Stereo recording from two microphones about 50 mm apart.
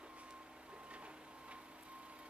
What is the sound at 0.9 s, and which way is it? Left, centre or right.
Printer, right.